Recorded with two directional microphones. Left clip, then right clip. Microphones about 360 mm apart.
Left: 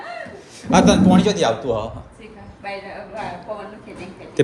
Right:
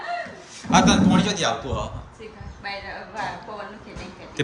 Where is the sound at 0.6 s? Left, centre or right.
Centre.